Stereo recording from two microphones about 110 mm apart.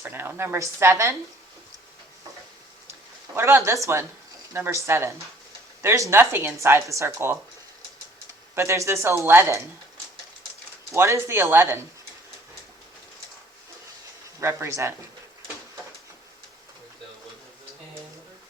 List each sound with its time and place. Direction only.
0.0 s a woman's voice: 20° right (ahead or behind)
3.3 s a woman's voice: 20° right (ahead or behind)
8.5 s a woman's voice: 25° right (ahead or behind)
10.9 s a woman's voice: 25° right (ahead or behind)
14.4 s a woman's voice: 25° right (ahead or behind)